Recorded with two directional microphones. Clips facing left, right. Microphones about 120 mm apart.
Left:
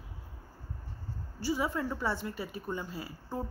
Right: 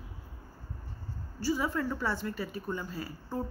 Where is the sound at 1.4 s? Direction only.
20° left (ahead or behind).